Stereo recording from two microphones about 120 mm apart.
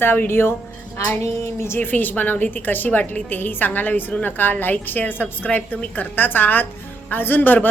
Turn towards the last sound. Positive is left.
turn(degrees=15)  # may be behind; listen again after turning